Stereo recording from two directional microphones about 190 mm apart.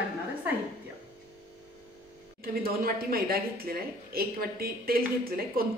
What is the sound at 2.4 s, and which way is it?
Speech, 50° right (ahead or behind).